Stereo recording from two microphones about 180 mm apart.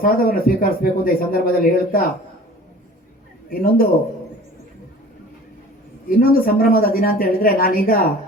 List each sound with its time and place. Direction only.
0.0 s speech: 50° left (ahead or behind)
3.5 s speech: 50° left (ahead or behind)
6.1 s speech: 55° left (ahead or behind)